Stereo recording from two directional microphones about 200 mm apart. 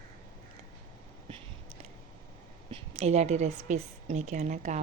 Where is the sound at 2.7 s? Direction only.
30° right (ahead or behind).